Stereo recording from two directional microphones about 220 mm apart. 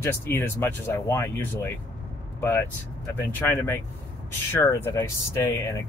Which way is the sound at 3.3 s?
10° left (ahead or behind).